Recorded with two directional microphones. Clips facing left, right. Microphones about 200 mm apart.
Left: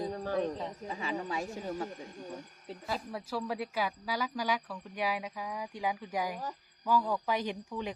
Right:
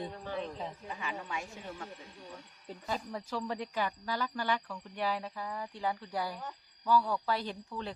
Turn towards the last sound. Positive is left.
turn(degrees=15)  # may be behind; listen again after turning